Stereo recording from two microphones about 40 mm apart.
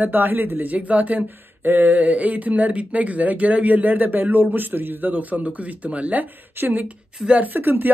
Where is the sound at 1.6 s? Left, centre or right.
Right.